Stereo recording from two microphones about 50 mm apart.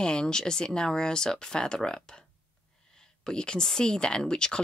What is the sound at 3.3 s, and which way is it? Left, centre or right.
Speech, centre.